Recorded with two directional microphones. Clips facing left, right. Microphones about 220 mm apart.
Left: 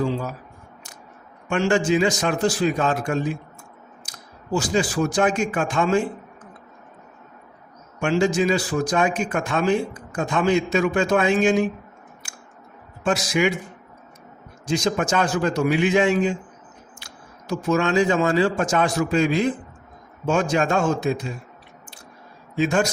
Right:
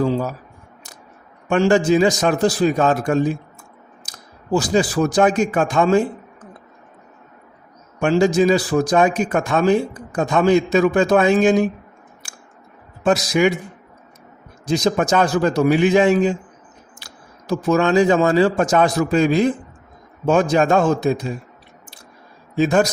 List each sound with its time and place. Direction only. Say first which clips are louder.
1.5 s a man's voice: right 5 dB; 35° right (ahead or behind)
4.5 s a man's voice: right 4 dB; 35° right (ahead or behind)
7.9 s a man's voice: right 5 dB; 35° right (ahead or behind)
12.2 s a sound: even; 35° right (ahead or behind)
13.1 s a man's voice: right 4 dB; 40° right (ahead or behind)
14.7 s a man's voice: right 4 dB; 35° right (ahead or behind)
22.6 s a man's voice: right 4 dB; 40° right (ahead or behind)